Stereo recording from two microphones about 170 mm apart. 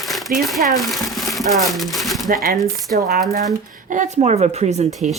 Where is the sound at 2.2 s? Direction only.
55° right (ahead or behind); by 5.1 s 40° right (ahead or behind).